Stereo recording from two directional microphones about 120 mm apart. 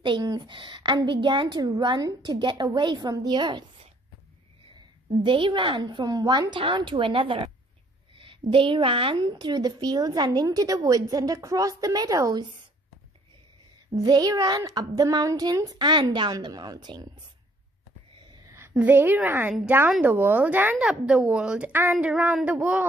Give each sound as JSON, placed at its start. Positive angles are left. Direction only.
{"t": 0.2, "sound": "a woman's voice", "side_deg": -35}
{"t": 5.2, "sound": "a woman's voice", "side_deg": -45}
{"t": 13.9, "sound": "a woman's voice", "side_deg": -30}
{"t": 18.8, "sound": "a woman's voice", "side_deg": -15}